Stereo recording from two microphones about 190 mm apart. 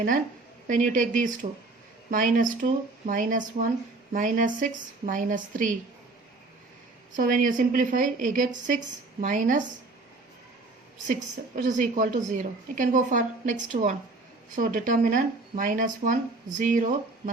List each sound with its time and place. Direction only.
0.7 s a woman's voice: 40° right (ahead or behind)
7.1 s a woman's voice: 45° right (ahead or behind)
11.0 s a woman's voice: 40° right (ahead or behind)